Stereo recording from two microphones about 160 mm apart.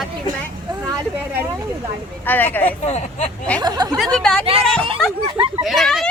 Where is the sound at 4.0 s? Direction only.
5° left (ahead or behind).